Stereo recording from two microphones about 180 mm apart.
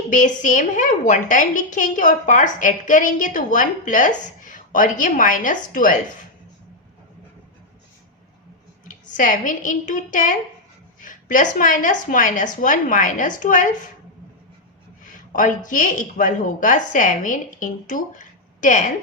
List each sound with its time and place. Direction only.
0.1 s a woman's voice: 45° left (ahead or behind)
8.9 s a woman's voice: 45° left (ahead or behind)
15.3 s a woman's voice: 45° left (ahead or behind)